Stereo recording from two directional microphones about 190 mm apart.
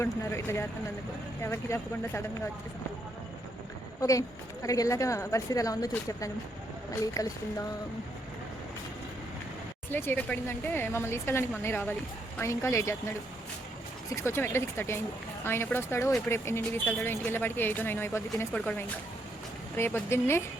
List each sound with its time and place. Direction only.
0.0 s speech: 15° left (ahead or behind)
4.0 s speech: 15° left (ahead or behind)
9.9 s speech: 10° left (ahead or behind)
14.3 s speech: 15° left (ahead or behind)